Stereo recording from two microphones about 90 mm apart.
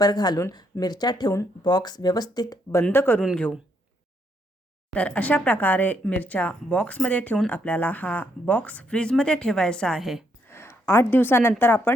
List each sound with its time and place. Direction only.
0.0 s speech: 50° left (ahead or behind)
2.9 s speech: 25° left (ahead or behind)
4.9 s speech: 15° left (ahead or behind); by 10.2 s centre (ahead or behind)
10.4 s a sound: 25° left (ahead or behind)
11.6 s speech: 25° left (ahead or behind)